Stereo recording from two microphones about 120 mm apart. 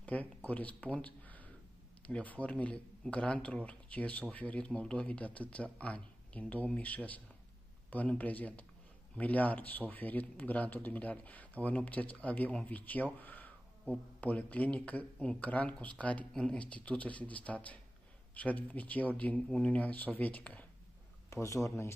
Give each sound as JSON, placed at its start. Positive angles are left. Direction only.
{"t": 0.0, "sound": "speech", "side_deg": 15}
{"t": 21.3, "sound": "speech", "side_deg": 25}